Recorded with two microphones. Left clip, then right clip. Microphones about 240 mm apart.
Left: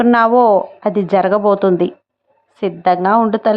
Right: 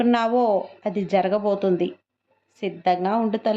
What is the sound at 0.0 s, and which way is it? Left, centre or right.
A woman's voice, left.